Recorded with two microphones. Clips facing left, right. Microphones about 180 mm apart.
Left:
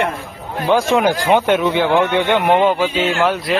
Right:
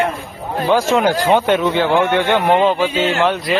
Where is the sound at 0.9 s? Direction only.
15° left (ahead or behind).